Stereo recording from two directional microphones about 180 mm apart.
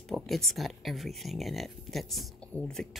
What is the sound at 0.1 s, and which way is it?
Speech, centre (ahead or behind).